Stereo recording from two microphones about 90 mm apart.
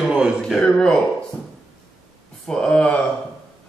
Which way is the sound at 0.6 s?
10° left (ahead or behind).